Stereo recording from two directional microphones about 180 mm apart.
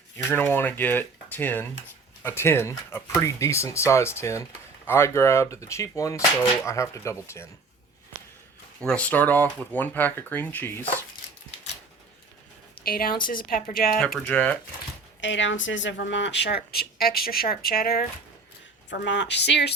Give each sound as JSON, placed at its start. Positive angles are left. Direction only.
{"t": 0.3, "sound": "speech", "side_deg": 10}
{"t": 8.8, "sound": "speech", "side_deg": 5}
{"t": 12.8, "sound": "a woman's voice", "side_deg": 55}
{"t": 14.3, "sound": "speech", "side_deg": 10}
{"t": 15.2, "sound": "speech", "side_deg": 90}
{"t": 18.9, "sound": "speech", "side_deg": 75}